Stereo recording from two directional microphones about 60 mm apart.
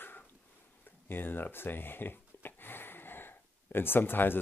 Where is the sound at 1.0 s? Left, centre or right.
Left.